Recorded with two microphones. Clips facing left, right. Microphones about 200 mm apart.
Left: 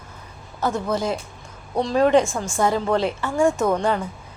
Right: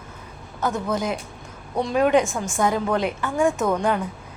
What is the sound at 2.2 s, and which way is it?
Speech, 20° right (ahead or behind).